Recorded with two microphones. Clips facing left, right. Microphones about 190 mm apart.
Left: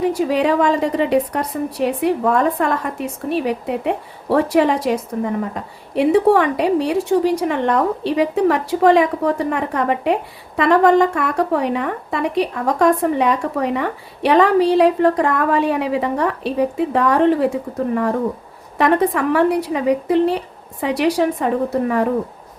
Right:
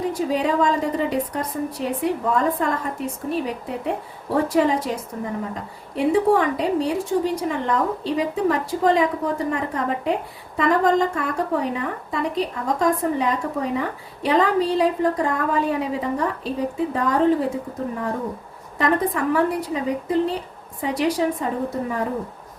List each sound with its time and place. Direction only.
0.0 s a woman's voice: 70° left (ahead or behind)
18.8 s a woman's voice: 70° left (ahead or behind)